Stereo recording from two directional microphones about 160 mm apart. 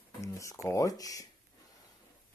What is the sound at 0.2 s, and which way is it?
Speech, 20° left (ahead or behind).